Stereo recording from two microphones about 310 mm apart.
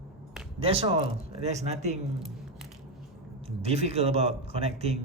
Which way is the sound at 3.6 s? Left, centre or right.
Centre.